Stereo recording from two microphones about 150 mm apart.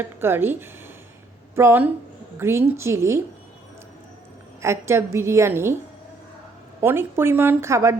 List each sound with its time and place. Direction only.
0.0 s a woman's voice: 15° right (ahead or behind)
4.6 s a woman's voice: 15° right (ahead or behind)
6.8 s a woman's voice: 15° right (ahead or behind)